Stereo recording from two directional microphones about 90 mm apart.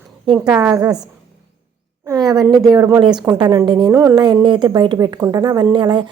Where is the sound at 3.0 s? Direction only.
55° right (ahead or behind).